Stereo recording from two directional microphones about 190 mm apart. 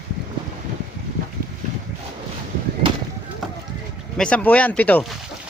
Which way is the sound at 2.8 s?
25° right (ahead or behind).